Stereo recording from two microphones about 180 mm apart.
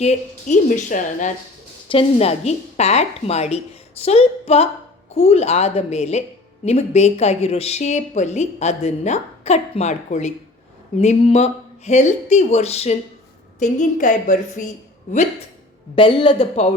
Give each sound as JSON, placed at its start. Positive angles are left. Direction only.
{"t": 0.0, "sound": "a woman's voice", "side_deg": 40}
{"t": 1.9, "sound": "a woman's voice", "side_deg": 35}
{"t": 16.0, "sound": "a woman's voice", "side_deg": 30}